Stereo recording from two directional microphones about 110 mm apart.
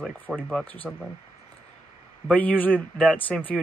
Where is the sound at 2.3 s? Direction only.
15° left (ahead or behind).